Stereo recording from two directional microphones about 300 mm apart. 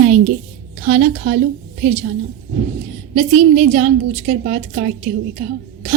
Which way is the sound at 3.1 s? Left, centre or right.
Right.